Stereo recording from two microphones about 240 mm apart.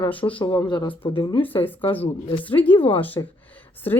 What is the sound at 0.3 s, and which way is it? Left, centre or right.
Speech, left.